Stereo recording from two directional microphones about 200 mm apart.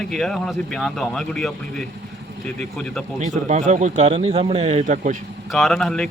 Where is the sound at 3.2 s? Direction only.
35° right (ahead or behind).